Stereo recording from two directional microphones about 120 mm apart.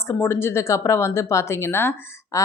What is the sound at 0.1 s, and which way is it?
Speech, 20° left (ahead or behind).